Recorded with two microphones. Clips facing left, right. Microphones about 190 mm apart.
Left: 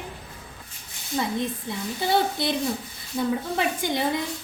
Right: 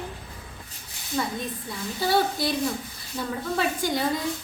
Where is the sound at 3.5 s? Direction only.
20° left (ahead or behind).